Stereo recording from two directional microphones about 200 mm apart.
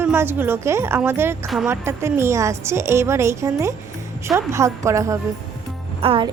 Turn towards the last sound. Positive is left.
turn(degrees=-30)  # may be behind; listen again after turning